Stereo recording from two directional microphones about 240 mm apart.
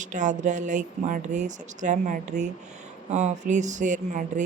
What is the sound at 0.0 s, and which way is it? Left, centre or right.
Speech, right.